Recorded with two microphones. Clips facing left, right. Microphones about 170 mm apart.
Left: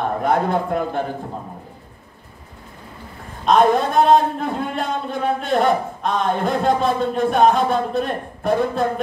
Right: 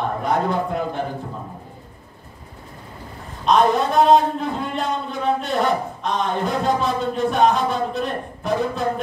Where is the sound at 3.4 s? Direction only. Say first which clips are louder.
Left 2 dB; 50° left (ahead or behind).